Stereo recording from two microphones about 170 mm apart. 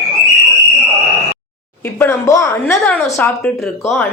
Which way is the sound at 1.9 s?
15° left (ahead or behind).